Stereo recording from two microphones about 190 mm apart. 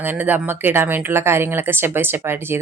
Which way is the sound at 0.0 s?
10° right (ahead or behind).